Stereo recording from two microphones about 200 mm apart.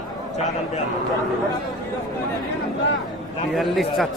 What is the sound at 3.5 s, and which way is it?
Speech, centre (ahead or behind).